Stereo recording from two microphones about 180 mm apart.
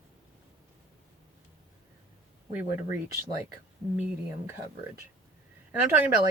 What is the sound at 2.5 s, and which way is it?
Speech, 10° right (ahead or behind).